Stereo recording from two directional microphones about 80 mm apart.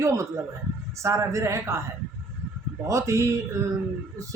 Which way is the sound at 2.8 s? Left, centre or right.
Right.